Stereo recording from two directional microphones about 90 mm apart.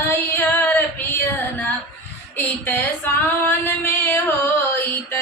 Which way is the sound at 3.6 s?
25° left (ahead or behind).